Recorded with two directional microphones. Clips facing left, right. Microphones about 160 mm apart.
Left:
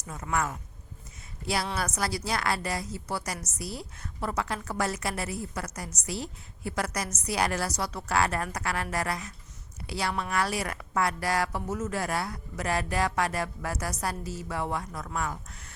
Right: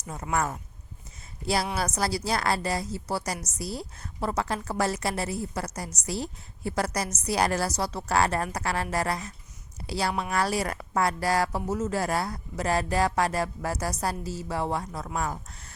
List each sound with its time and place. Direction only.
0.1 s a woman's voice: 30° right (ahead or behind)
1.8 s a woman's voice: 35° right (ahead or behind)